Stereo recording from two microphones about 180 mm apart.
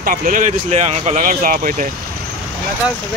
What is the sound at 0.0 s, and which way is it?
Speech, 50° right (ahead or behind).